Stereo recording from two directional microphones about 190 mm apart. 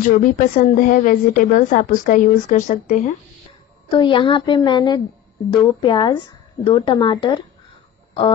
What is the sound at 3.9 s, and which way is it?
Speech, 25° left (ahead or behind).